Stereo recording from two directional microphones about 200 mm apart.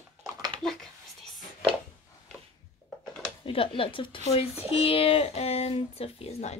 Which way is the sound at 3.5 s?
25° left (ahead or behind).